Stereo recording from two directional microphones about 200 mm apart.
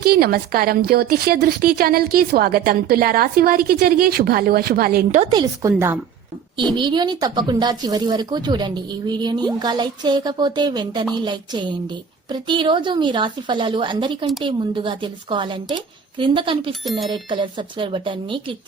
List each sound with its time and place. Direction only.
0.0 s a woman's voice: 50° right (ahead or behind)
5.2 s speech: 25° right (ahead or behind)